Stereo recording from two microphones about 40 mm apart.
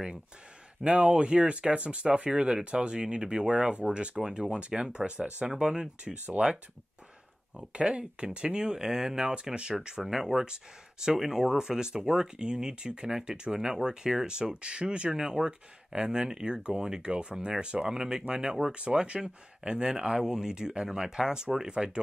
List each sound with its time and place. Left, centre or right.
0.8 s speech: right
7.7 s speech: right
10.1 s speech: centre
10.4 s speech: centre